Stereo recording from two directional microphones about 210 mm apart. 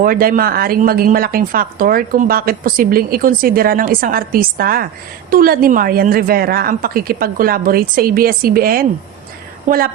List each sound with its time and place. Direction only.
0.0 s a woman's voice: 45° right (ahead or behind)